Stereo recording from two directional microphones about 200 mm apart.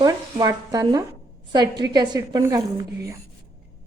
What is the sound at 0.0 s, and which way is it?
A woman's voice, 20° right (ahead or behind).